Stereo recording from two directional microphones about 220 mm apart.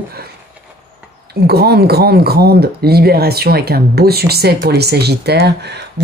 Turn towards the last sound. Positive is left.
turn(degrees=-45)  # may be behind; listen again after turning